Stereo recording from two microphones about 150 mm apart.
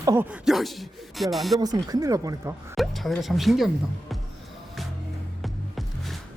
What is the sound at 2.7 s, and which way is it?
Speech, centre (ahead or behind).